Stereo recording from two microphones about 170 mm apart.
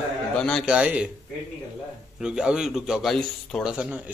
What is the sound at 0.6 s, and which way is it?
Speech, 5° right (ahead or behind).